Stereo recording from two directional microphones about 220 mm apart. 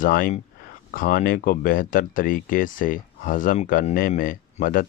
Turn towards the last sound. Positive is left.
turn(degrees=40)  # may be behind; listen again after turning